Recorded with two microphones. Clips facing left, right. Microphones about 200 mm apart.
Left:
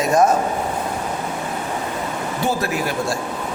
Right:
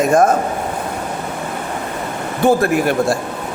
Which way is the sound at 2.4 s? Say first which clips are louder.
Right 9 dB; 55° right (ahead or behind).